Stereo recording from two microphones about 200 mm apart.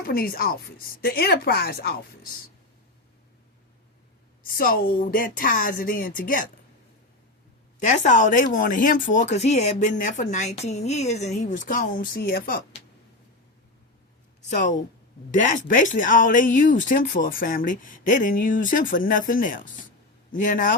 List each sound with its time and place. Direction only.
0.0 s a woman's voice: 50° left (ahead or behind)
4.4 s a woman's voice: 45° left (ahead or behind)
7.9 s speech: 35° left (ahead or behind)
14.5 s speech: 40° left (ahead or behind)